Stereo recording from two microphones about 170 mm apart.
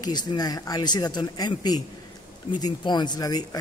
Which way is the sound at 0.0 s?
25° left (ahead or behind).